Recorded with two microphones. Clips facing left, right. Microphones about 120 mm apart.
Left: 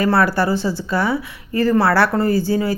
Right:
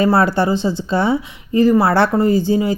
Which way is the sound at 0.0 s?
25° right (ahead or behind).